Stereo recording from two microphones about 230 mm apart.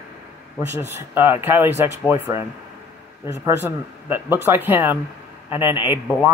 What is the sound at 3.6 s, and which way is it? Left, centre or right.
Speech, centre.